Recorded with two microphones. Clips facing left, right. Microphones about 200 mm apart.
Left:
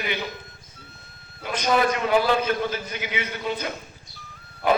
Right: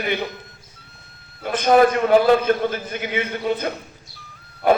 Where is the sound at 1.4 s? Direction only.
55° right (ahead or behind).